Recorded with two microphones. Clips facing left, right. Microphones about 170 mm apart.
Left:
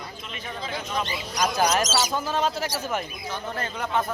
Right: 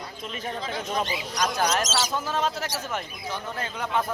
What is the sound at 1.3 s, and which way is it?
Speech, centre (ahead or behind).